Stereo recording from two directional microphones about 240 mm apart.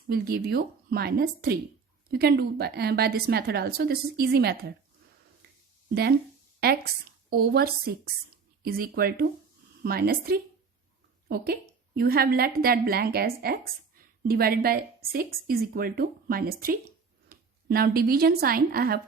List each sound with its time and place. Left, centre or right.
0.1 s a woman's voice: right
5.9 s a woman's voice: right
11.9 s a woman's voice: right